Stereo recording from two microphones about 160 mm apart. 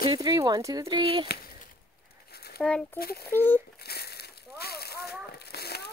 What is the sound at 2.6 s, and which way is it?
Speech, 5° left (ahead or behind).